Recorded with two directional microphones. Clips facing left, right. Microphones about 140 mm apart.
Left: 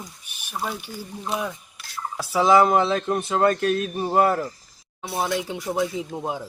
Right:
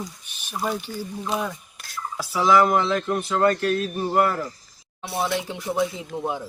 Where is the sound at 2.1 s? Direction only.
25° left (ahead or behind).